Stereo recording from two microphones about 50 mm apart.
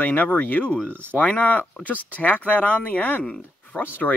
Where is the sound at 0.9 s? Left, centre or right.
Right.